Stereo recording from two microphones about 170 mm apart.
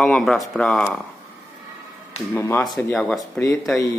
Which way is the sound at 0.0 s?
5° left (ahead or behind).